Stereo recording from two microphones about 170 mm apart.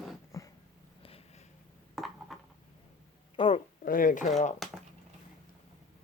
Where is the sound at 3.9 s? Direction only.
50° left (ahead or behind).